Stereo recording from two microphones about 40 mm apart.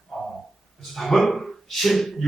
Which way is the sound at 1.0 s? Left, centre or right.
Centre.